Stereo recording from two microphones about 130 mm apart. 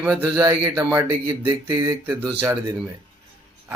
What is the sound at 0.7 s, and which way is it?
Speech, 20° right (ahead or behind).